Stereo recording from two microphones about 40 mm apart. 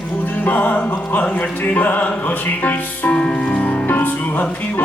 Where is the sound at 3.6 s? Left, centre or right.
Left.